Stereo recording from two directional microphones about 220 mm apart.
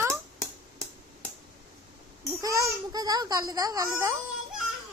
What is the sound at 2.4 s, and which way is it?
A child's voice, 15° right (ahead or behind).